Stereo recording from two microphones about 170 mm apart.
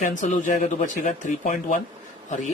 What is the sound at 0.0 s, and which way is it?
Speech, 50° left (ahead or behind).